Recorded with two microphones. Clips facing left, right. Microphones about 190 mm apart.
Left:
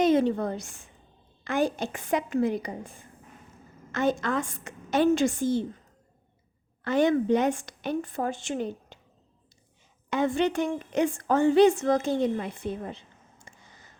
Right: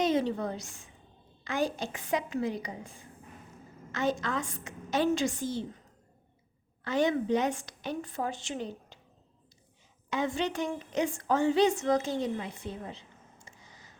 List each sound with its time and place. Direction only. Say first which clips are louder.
0.0 s a woman's voice: left 5 dB; 55° left (ahead or behind)
6.8 s a woman's voice: left 5 dB; 55° left (ahead or behind)
10.1 s a woman's voice: left 6 dB; 55° left (ahead or behind)